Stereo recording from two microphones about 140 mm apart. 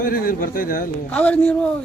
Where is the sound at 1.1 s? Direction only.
10° left (ahead or behind).